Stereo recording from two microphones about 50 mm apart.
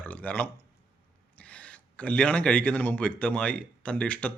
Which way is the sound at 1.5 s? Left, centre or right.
Left.